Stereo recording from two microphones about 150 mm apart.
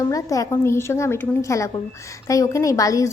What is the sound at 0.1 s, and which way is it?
A woman's voice, 20° left (ahead or behind).